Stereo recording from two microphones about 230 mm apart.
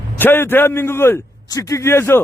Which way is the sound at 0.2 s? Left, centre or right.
Centre.